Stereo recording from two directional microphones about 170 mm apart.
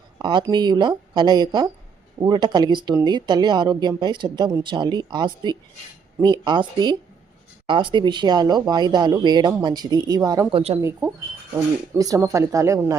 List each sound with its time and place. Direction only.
0.2 s speech: 25° right (ahead or behind)
10.5 s speech: 35° right (ahead or behind)
10.8 s speech: 15° right (ahead or behind)